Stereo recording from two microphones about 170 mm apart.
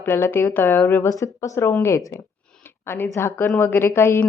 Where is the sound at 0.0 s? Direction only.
15° left (ahead or behind).